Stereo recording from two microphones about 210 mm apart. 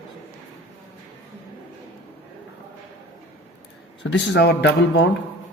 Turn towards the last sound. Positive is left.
turn(degrees=50)  # may be behind; listen again after turning